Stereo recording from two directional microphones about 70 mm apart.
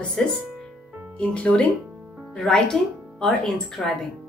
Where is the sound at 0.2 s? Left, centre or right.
Centre.